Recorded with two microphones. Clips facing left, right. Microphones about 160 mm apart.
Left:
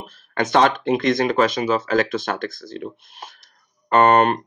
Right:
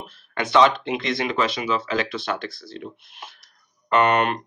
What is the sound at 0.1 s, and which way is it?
Speech, 45° left (ahead or behind).